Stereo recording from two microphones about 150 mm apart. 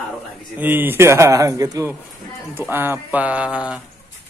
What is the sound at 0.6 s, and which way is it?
Speech, 15° right (ahead or behind).